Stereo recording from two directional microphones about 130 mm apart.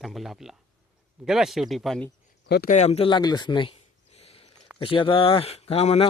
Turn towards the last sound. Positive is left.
turn(degrees=55)  # may be behind; listen again after turning